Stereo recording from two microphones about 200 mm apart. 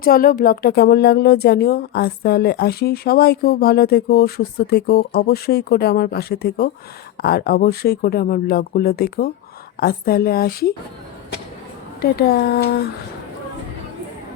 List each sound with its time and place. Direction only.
0.0 s a woman's voice: 45° left (ahead or behind)
12.0 s a woman's voice: 55° left (ahead or behind)